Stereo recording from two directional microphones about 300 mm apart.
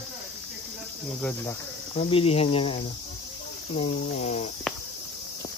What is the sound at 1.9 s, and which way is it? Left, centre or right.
Speech, centre.